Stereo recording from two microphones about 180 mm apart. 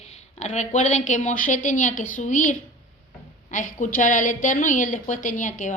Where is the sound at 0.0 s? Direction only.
40° left (ahead or behind).